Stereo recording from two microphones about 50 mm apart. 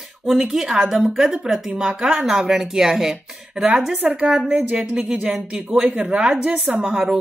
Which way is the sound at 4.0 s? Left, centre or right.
Right.